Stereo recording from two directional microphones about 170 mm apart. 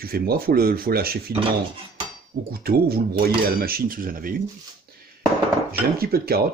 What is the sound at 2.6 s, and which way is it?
Speech, 65° right (ahead or behind).